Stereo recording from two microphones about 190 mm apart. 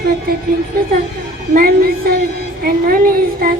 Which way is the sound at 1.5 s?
50° right (ahead or behind).